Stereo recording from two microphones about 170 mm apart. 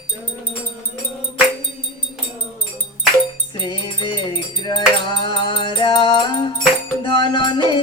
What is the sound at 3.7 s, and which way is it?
Wind chime, 30° left (ahead or behind).